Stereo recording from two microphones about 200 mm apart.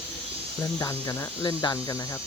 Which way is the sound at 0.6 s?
15° left (ahead or behind).